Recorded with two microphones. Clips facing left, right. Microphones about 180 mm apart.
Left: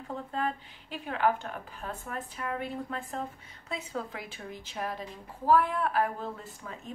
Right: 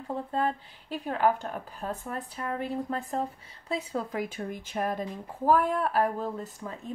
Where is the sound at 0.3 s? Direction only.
35° right (ahead or behind).